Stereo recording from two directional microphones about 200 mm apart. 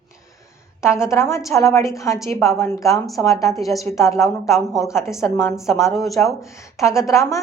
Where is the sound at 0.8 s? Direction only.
15° left (ahead or behind).